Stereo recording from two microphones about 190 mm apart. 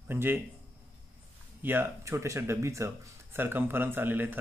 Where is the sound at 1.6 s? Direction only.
10° right (ahead or behind).